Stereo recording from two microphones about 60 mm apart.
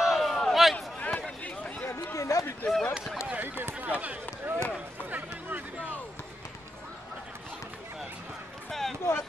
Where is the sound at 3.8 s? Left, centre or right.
Right.